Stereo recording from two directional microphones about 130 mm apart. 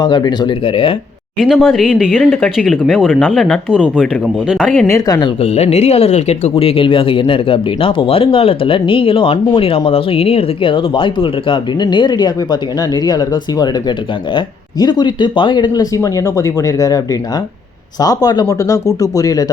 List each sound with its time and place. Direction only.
0.0 s speech: 35° left (ahead or behind)
1.4 s speech: centre (ahead or behind)
4.4 s speech: 5° left (ahead or behind)
4.9 s speech: 25° left (ahead or behind)
5.4 s speech: 50° left (ahead or behind)
6.6 s speech: 45° left (ahead or behind); by 19.5 s 25° left (ahead or behind)